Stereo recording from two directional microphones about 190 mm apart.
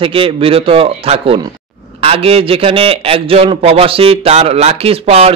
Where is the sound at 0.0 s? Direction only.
30° right (ahead or behind).